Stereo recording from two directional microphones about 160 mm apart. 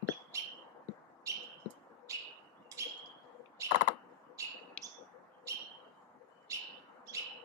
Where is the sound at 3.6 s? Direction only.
20° right (ahead or behind).